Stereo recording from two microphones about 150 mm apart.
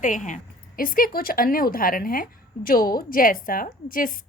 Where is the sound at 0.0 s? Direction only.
55° left (ahead or behind).